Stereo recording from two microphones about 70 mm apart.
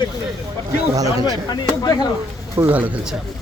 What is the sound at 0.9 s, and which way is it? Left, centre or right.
Speech, right.